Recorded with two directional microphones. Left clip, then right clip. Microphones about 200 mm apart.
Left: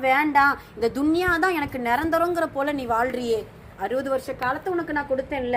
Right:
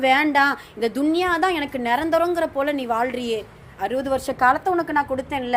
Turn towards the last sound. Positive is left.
turn(degrees=-15)  # may be behind; listen again after turning